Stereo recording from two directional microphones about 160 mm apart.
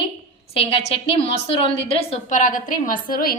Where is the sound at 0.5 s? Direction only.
35° left (ahead or behind).